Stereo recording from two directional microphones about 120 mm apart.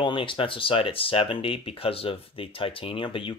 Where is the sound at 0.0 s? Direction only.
45° left (ahead or behind).